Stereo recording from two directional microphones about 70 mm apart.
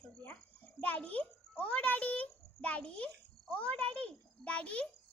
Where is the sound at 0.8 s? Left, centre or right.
Left.